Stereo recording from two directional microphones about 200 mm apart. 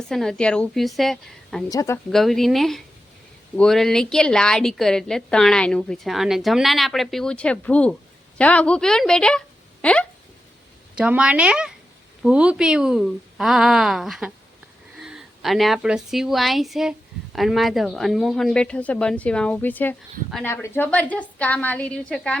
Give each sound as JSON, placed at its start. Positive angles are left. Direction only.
{"t": 0.1, "sound": "a woman's voice", "side_deg": 5}
{"t": 1.7, "sound": "a woman's voice", "side_deg": 15}
{"t": 2.0, "sound": "a woman's voice", "side_deg": 0}
{"t": 9.8, "sound": "a sound", "side_deg": 5}
{"t": 10.9, "sound": "a woman's voice", "side_deg": -5}